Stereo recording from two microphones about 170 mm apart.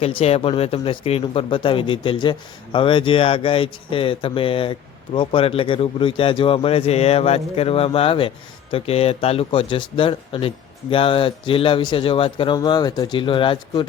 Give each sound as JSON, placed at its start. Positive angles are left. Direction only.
{"t": 0.0, "sound": "speech", "side_deg": 35}